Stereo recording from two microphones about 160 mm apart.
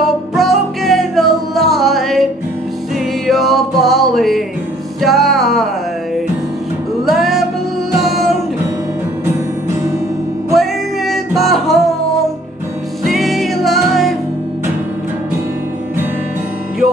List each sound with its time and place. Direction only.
0.4 s music: centre (ahead or behind)
3.3 s music: centre (ahead or behind)
7.1 s music: centre (ahead or behind)
10.5 s music: centre (ahead or behind)
13.0 s music: centre (ahead or behind)